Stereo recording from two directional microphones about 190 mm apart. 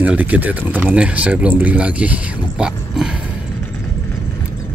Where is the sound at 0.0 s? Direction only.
5° right (ahead or behind).